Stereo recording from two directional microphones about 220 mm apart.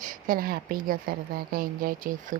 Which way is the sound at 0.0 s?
40° right (ahead or behind).